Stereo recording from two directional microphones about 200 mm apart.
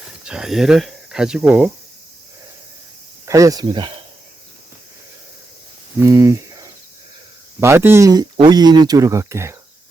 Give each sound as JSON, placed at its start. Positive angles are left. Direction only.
{"t": 0.3, "sound": "speech", "side_deg": 0}
{"t": 3.2, "sound": "speech", "side_deg": -15}
{"t": 6.0, "sound": "speech", "side_deg": -15}